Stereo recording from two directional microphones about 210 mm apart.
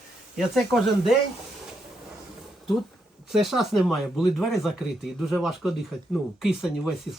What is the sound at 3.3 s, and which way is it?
Speech, centre (ahead or behind).